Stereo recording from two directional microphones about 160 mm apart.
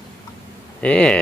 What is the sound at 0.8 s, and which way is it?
Speech, 5° left (ahead or behind).